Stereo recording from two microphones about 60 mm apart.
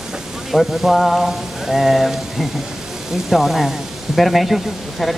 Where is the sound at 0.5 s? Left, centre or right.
Centre.